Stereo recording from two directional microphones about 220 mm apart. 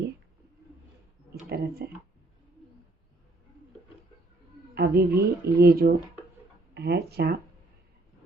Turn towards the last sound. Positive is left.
turn(degrees=-45)  # may be behind; listen again after turning